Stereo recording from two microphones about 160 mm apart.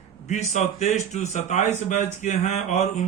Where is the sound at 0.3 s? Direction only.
45° left (ahead or behind).